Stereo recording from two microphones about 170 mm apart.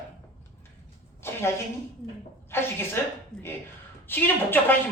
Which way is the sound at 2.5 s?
15° left (ahead or behind).